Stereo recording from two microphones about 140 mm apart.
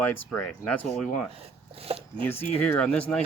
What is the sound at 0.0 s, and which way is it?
Speech, 10° left (ahead or behind).